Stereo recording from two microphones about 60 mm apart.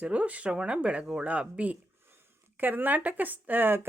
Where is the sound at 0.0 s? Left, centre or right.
Right.